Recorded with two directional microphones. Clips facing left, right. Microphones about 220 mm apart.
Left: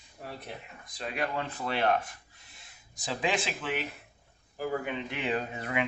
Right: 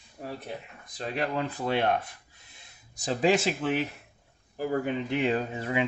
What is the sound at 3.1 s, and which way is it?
Speech, 40° right (ahead or behind).